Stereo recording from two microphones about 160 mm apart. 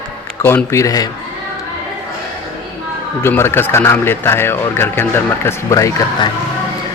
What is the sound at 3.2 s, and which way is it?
Speech, 15° left (ahead or behind).